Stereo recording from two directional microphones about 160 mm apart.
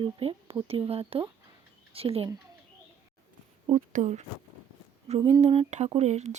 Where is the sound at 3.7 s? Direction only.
50° right (ahead or behind).